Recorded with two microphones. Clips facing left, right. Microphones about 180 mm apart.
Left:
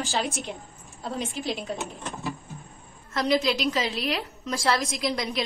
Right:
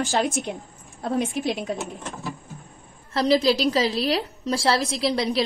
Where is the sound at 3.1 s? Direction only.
35° right (ahead or behind).